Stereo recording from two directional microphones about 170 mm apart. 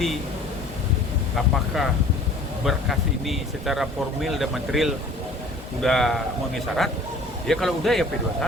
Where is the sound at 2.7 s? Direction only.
Centre (ahead or behind).